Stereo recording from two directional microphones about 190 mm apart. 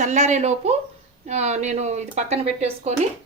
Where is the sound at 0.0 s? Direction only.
40° right (ahead or behind).